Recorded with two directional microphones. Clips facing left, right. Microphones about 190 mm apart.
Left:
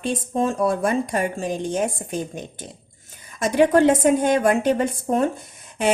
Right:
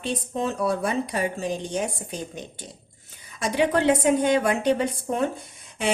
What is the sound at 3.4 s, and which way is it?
A woman's voice, 50° left (ahead or behind).